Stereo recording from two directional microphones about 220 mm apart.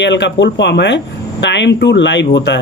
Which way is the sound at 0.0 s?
55° left (ahead or behind).